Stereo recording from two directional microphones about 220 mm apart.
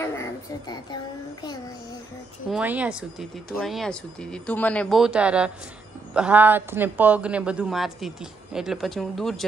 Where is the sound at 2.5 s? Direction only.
5° right (ahead or behind).